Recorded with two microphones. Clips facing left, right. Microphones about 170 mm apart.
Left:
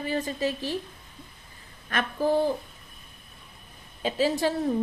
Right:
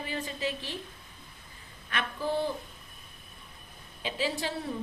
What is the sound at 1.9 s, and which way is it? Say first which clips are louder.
Speech: left 7 dB; 45° left (ahead or behind).